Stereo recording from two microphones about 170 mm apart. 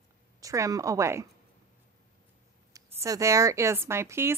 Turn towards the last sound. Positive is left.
turn(degrees=-15)  # may be behind; listen again after turning